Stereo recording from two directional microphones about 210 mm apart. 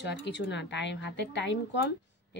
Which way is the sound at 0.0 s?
55° left (ahead or behind).